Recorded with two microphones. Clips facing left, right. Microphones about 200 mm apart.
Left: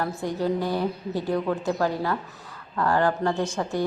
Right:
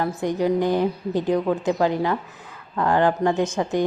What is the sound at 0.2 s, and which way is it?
A woman's voice, 20° right (ahead or behind).